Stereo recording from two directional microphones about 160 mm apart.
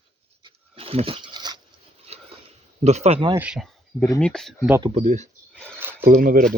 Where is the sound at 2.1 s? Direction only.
40° right (ahead or behind).